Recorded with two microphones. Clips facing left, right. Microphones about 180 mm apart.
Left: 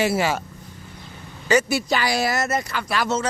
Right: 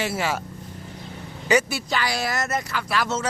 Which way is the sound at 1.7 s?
10° left (ahead or behind).